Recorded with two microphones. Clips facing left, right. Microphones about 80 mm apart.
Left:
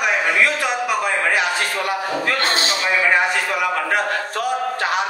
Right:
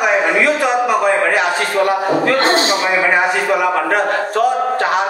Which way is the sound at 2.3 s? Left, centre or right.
Right.